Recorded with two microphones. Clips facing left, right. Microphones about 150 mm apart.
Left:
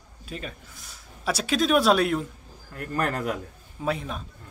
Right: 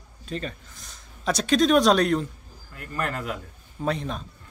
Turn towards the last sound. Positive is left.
turn(degrees=5)  # may be behind; listen again after turning